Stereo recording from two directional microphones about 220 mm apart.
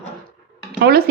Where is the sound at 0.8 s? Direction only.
45° right (ahead or behind).